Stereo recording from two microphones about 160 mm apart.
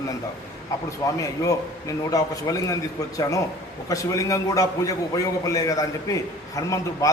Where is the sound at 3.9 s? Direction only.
20° left (ahead or behind).